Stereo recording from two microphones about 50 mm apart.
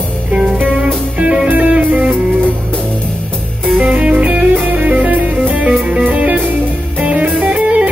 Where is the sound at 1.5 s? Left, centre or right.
Right.